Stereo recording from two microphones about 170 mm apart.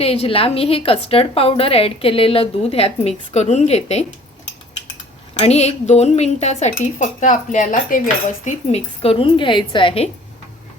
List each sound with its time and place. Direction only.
0.0 s a woman's voice: 35° left (ahead or behind)
5.4 s a woman's voice: 40° left (ahead or behind)
9.0 s a woman's voice: 35° left (ahead or behind)